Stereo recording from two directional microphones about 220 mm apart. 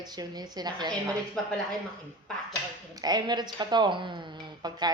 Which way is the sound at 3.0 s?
20° right (ahead or behind).